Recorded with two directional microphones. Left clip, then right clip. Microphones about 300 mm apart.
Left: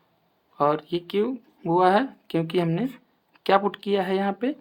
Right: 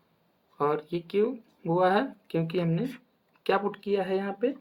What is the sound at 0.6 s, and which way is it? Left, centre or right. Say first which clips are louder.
Speech: left 5 dB; left.